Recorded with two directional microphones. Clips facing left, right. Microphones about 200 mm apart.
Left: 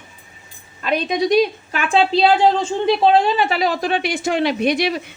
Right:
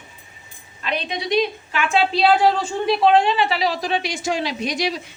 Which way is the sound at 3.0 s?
35° left (ahead or behind).